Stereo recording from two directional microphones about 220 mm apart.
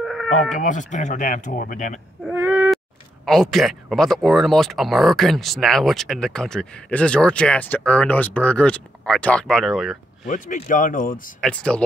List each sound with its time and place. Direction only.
0.0 s a sound: centre (ahead or behind)
0.5 s speech: 35° left (ahead or behind)
2.2 s whimper: 10° right (ahead or behind)
3.3 s speech: centre (ahead or behind)
10.2 s speech: 35° left (ahead or behind)
11.4 s speech: 5° left (ahead or behind)